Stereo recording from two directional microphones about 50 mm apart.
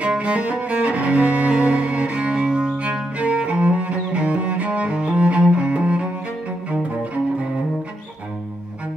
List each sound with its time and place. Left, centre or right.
0.2 s cello: right